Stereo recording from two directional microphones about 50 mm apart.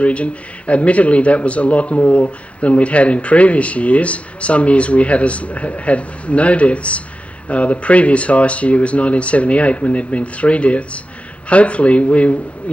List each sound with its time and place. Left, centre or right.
0.0 s speech: left